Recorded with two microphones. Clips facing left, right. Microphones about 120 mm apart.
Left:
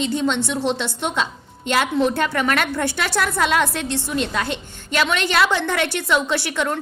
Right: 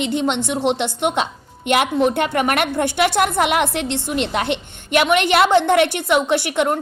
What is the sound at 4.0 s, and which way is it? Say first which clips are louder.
Speech: left 1 dB; 55° right (ahead or behind).